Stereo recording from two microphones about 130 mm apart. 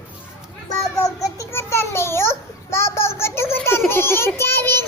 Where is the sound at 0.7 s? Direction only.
25° left (ahead or behind).